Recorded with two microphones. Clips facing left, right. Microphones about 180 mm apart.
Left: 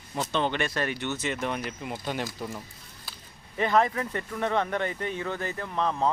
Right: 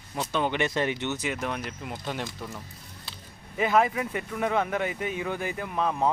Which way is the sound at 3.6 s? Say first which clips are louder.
Right 1 dB; 5° right (ahead or behind).